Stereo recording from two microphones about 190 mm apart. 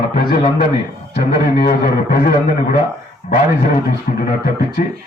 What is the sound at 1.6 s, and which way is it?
Speech, 50° left (ahead or behind).